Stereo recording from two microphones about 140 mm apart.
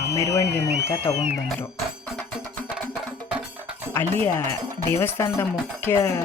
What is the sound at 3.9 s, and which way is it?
Speech, 15° left (ahead or behind).